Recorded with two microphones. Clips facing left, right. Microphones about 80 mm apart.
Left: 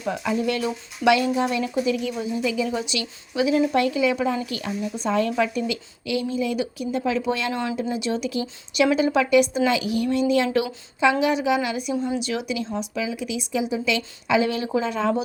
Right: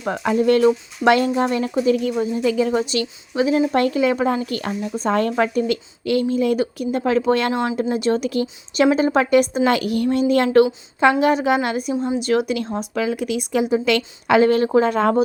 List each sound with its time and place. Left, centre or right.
0.0 s a woman's voice: right
8.7 s a woman's voice: right